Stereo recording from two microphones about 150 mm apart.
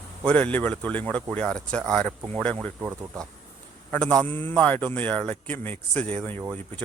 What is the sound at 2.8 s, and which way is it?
Speech, 15° right (ahead or behind).